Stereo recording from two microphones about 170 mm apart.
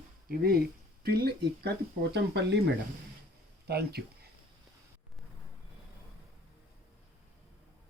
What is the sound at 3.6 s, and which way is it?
Speech, 70° right (ahead or behind).